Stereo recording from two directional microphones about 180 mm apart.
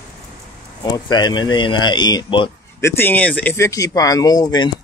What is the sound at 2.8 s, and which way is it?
Speech, 10° left (ahead or behind).